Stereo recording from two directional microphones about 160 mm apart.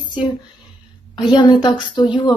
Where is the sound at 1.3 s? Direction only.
30° left (ahead or behind).